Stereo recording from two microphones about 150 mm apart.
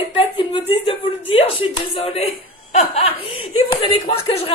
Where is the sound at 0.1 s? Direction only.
35° left (ahead or behind).